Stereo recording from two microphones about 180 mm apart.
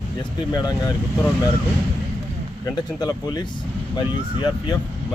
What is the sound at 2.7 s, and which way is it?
A man's voice, 20° left (ahead or behind).